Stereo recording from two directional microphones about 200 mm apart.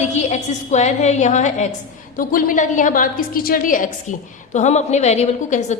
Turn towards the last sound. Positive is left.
turn(degrees=35)  # may be behind; listen again after turning